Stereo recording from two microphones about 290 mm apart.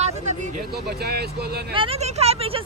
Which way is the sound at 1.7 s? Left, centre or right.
Centre.